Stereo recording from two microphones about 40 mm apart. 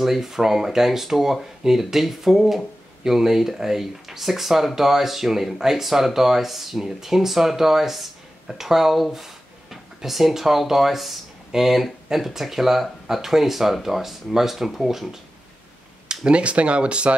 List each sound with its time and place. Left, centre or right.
0.0 s speech: centre
16.1 s speech: right